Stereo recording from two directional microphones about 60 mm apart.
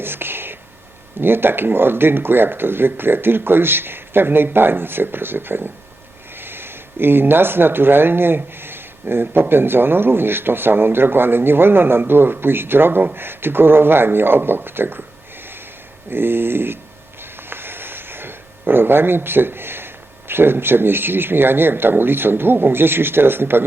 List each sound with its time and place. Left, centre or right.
0.0 s whispering: right
1.2 s speech: right
16.0 s speech: right